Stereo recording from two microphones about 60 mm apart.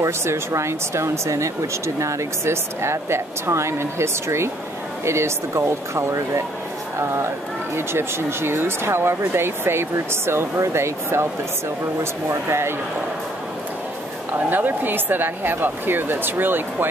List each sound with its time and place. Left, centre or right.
0.0 s speech: right
14.5 s speech: right